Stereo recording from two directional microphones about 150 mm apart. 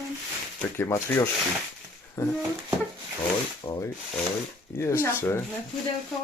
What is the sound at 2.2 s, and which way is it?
Speech, 15° left (ahead or behind).